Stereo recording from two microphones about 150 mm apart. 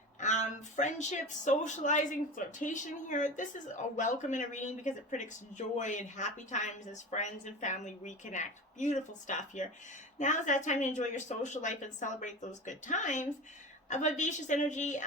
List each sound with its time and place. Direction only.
0.2 s a woman's voice: 55° left (ahead or behind)